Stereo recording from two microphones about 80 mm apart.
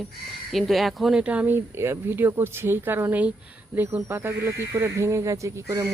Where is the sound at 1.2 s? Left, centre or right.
Centre; by 5.9 s right.